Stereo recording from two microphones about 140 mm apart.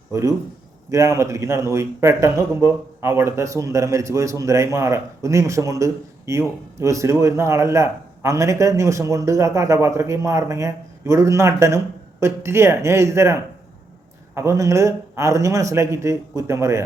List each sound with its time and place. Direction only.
0.1 s a man's voice: 20° right (ahead or behind)